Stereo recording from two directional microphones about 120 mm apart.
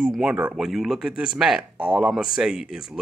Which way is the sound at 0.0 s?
5° right (ahead or behind).